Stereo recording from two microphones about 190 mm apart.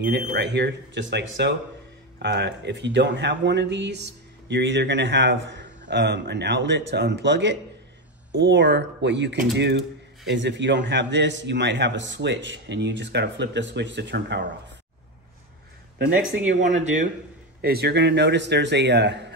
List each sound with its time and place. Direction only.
0.3 s speech: 65° right (ahead or behind)
16.0 s speech: 90° right
16.6 s speech: 40° right (ahead or behind)
17.6 s speech: 55° right (ahead or behind)